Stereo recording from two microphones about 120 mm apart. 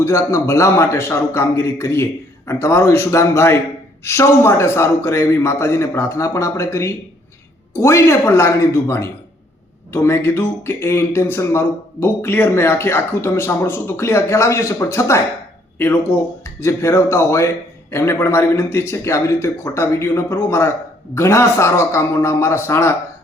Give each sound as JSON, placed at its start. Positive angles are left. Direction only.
{"t": 0.0, "sound": "speech", "side_deg": 25}
{"t": 16.4, "sound": "speech", "side_deg": 25}